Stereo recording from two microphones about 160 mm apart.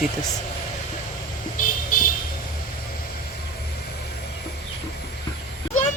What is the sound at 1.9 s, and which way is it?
Vehicle, 55° left (ahead or behind).